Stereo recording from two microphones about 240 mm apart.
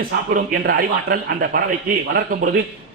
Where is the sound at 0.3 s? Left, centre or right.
Right.